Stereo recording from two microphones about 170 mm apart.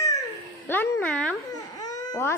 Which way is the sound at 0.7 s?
10° left (ahead or behind).